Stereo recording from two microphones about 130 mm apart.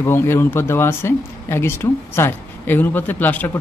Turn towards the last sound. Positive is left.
turn(degrees=15)  # may be behind; listen again after turning